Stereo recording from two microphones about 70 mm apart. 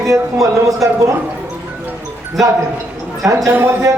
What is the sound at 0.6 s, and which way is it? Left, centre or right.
Speech, right.